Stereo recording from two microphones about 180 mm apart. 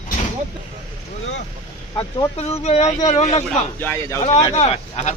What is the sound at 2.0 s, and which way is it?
Speech, 35° left (ahead or behind).